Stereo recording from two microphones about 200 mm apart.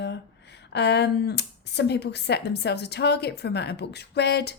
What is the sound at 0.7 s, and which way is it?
Speech, 55° left (ahead or behind).